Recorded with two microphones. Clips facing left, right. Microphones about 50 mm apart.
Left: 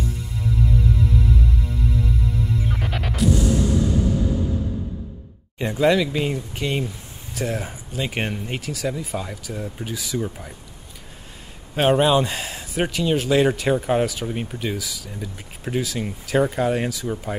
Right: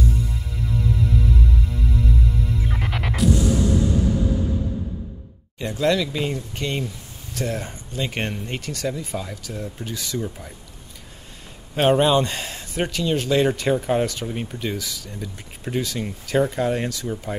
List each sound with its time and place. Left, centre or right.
3.2 s music: centre
5.6 s speech: centre
11.7 s speech: centre